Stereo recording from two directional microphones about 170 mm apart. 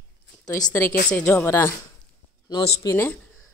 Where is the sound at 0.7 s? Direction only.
15° left (ahead or behind).